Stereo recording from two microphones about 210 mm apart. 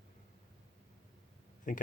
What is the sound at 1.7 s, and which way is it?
Speech, 35° left (ahead or behind).